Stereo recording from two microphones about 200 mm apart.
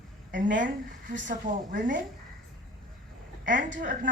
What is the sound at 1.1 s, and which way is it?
Speech, 40° right (ahead or behind).